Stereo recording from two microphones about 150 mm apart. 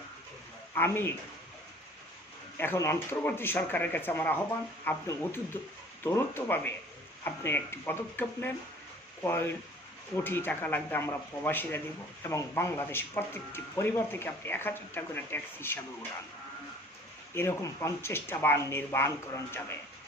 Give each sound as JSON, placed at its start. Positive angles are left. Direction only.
{"t": 0.7, "sound": "speech", "side_deg": 15}
{"t": 2.6, "sound": "speech", "side_deg": 15}
{"t": 17.3, "sound": "speech", "side_deg": 15}